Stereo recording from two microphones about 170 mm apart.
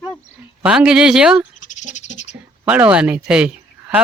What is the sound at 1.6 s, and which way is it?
Frog, 45° left (ahead or behind).